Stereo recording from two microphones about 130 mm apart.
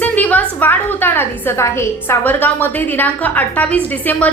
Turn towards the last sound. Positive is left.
turn(degrees=10)  # may be behind; listen again after turning